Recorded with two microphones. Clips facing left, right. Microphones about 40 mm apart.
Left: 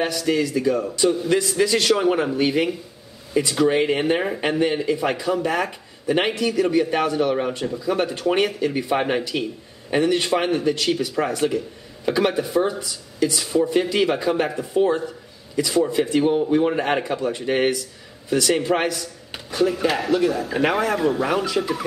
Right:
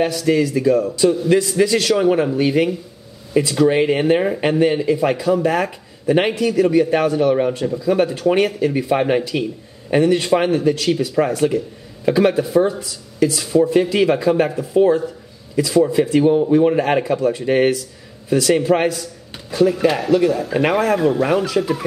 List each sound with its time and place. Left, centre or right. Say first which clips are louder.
0.1 s a man's voice: right 4 dB; centre
15.9 s a man's voice: right 4 dB; centre
16.3 s speech: right 5 dB; left
18.3 s a man's voice: right 4 dB; centre